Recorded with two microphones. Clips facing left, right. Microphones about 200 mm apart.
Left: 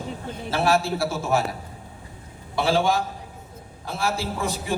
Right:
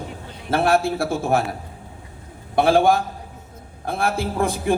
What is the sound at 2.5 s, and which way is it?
A man's voice, 55° right (ahead or behind).